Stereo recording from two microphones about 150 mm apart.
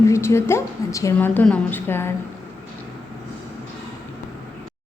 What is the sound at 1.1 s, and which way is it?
Speech, 10° left (ahead or behind).